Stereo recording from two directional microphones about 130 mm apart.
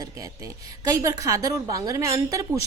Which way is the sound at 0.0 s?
25° right (ahead or behind).